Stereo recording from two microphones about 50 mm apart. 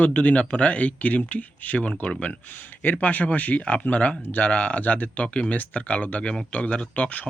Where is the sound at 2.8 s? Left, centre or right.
Left.